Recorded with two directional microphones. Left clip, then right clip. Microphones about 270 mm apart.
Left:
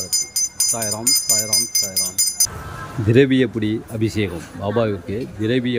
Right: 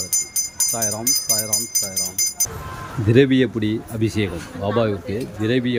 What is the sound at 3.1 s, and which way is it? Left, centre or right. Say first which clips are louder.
Speech: left 1 dB; centre.